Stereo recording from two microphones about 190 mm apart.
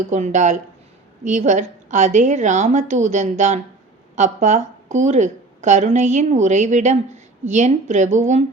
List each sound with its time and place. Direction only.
0.1 s a woman's voice: 40° right (ahead or behind)